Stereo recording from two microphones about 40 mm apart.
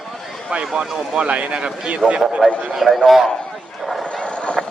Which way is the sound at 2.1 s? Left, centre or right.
Right.